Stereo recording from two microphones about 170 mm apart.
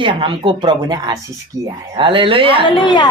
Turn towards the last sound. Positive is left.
turn(degrees=30)  # may be behind; listen again after turning